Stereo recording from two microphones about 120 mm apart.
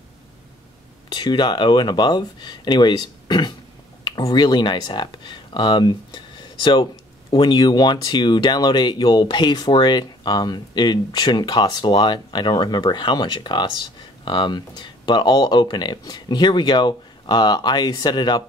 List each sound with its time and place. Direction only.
1.1 s speech: 40° left (ahead or behind)